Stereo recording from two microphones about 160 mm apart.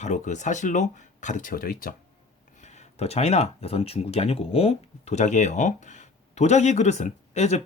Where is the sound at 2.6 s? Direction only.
45° left (ahead or behind).